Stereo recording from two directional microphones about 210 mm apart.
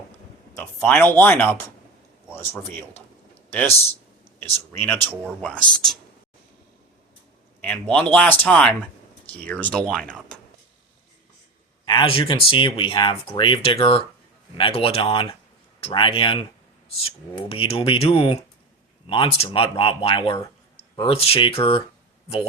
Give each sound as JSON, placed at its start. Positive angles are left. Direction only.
{"t": 0.5, "sound": "speech", "side_deg": 10}
{"t": 7.6, "sound": "speech", "side_deg": 5}
{"t": 11.9, "sound": "speech", "side_deg": 25}
{"t": 17.5, "sound": "speech", "side_deg": 25}